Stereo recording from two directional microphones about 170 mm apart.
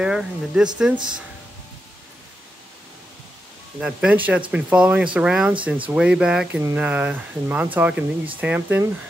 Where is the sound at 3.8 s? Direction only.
5° right (ahead or behind).